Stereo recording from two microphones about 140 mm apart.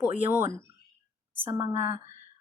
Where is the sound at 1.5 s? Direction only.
35° right (ahead or behind).